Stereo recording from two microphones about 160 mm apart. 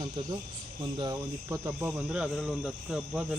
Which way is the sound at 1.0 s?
25° right (ahead or behind).